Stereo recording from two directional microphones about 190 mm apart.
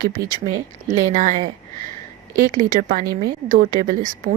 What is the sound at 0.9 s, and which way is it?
Speech, 15° right (ahead or behind).